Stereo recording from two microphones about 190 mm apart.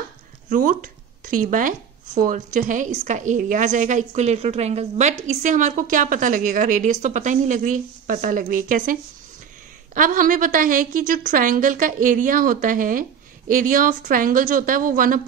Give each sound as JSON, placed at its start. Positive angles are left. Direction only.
{"t": 0.5, "sound": "speech", "side_deg": -45}
{"t": 9.9, "sound": "speech", "side_deg": -45}